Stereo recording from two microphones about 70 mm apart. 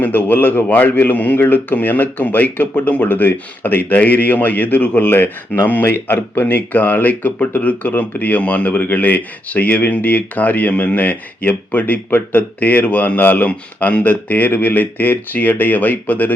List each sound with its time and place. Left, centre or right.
0.0 s speech: left